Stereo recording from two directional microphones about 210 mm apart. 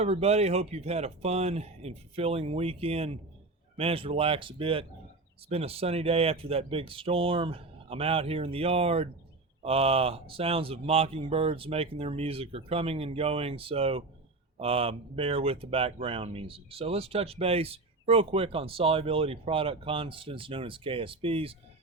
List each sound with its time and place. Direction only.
0.0 s speech: 30° right (ahead or behind)